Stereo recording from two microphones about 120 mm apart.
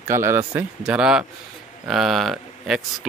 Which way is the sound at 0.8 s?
5° right (ahead or behind).